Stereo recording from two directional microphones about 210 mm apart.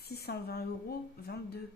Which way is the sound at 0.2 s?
50° left (ahead or behind).